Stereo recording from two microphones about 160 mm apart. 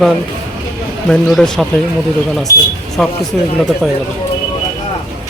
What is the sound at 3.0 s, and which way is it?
Speech, 5° left (ahead or behind).